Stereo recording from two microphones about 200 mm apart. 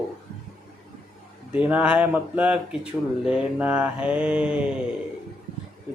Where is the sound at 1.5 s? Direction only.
5° right (ahead or behind).